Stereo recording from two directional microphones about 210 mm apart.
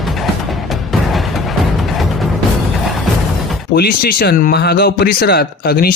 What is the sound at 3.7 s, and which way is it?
Speech, 45° left (ahead or behind).